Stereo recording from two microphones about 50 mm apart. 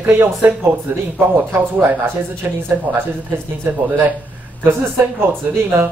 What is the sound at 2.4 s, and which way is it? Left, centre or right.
Speech, right.